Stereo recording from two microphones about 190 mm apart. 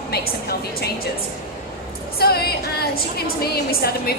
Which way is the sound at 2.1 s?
55° left (ahead or behind).